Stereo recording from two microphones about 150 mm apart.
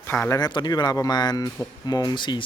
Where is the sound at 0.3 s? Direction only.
30° left (ahead or behind).